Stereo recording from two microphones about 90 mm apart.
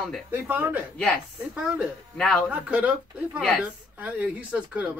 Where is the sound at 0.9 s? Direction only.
10° left (ahead or behind).